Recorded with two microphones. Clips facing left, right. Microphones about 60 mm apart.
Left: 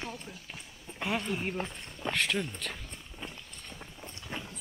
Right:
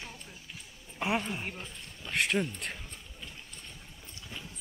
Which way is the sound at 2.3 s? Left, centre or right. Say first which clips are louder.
Right 2 dB; right.